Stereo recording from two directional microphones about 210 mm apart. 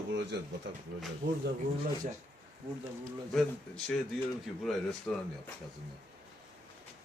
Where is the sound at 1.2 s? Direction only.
60° right (ahead or behind).